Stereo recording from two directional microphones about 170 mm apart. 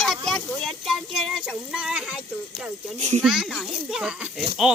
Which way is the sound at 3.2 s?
Centre (ahead or behind).